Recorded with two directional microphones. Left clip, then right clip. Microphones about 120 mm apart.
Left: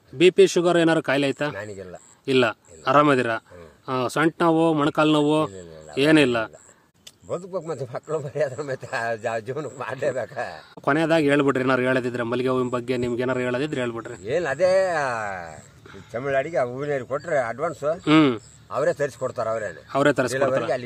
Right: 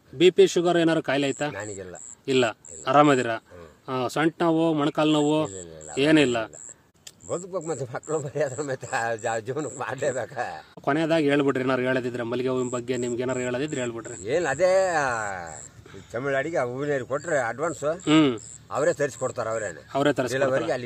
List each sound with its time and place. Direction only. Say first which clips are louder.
0.2 s a man's voice: left 2 dB; 40° left (ahead or behind)
1.6 s a man's voice: left 1 dB; 20° right (ahead or behind)
2.2 s a man's voice: left 3 dB; 40° left (ahead or behind)
7.2 s a man's voice: left 1 dB; 20° right (ahead or behind)
10.8 s a man's voice: left 3 dB; 45° left (ahead or behind)
14.2 s a man's voice: left 1 dB; 25° right (ahead or behind)
18.0 s a man's voice: left 2 dB; 50° left (ahead or behind)
18.7 s a man's voice: left 1 dB; 20° right (ahead or behind)
19.9 s a man's voice: left 4 dB; 50° left (ahead or behind)
20.3 s a man's voice: left 2 dB; 25° right (ahead or behind)